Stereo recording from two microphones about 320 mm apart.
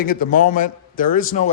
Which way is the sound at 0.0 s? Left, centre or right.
Left.